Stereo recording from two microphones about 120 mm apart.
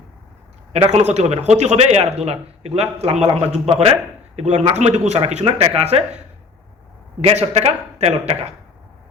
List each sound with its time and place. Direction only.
0.7 s speech: 65° right (ahead or behind)
7.2 s speech: 65° right (ahead or behind)